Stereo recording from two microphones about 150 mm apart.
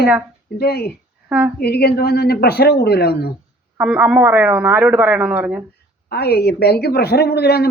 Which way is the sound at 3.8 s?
10° right (ahead or behind).